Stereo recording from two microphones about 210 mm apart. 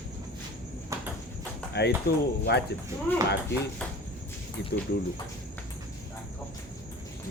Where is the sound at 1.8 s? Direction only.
50° left (ahead or behind).